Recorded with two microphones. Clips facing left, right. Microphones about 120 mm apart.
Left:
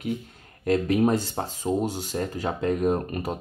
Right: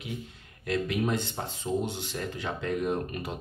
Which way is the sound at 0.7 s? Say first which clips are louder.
Left 7 dB; 40° left (ahead or behind).